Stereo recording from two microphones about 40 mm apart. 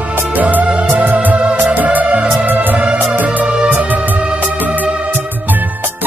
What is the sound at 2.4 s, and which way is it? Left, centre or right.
Music, right.